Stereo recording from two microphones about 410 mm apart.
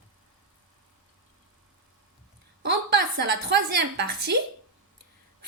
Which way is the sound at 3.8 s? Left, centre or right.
Right.